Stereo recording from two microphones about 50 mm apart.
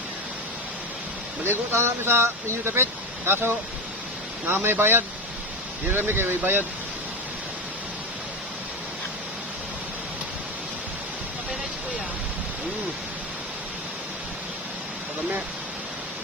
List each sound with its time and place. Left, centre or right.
1.5 s speech: right